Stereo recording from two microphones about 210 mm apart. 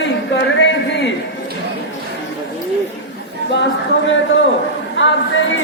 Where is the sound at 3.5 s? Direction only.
60° left (ahead or behind).